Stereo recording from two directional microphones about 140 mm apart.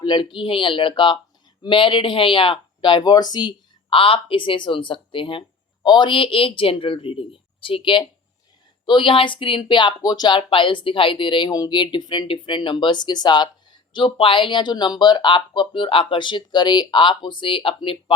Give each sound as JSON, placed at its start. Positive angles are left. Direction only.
{"t": 0.0, "sound": "speech", "side_deg": 30}